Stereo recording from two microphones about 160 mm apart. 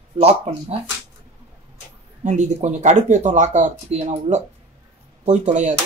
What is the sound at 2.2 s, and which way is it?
Speech, 50° right (ahead or behind).